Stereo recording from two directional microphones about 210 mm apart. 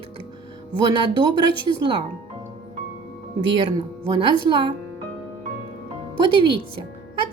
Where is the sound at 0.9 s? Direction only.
20° right (ahead or behind).